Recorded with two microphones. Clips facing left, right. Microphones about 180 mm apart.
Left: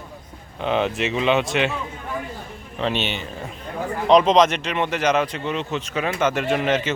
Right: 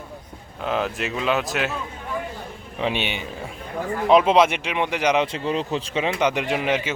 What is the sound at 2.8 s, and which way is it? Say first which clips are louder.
A man's voice: left 1 dB; 10° right (ahead or behind).